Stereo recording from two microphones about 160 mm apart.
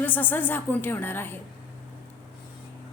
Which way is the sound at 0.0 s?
10° left (ahead or behind).